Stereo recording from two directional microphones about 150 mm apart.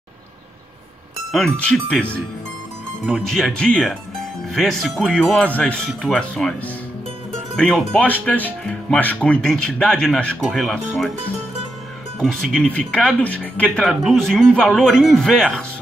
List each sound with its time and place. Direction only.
1.3 s speech: 5° left (ahead or behind)
7.5 s speech: 5° left (ahead or behind)
12.2 s speech: centre (ahead or behind)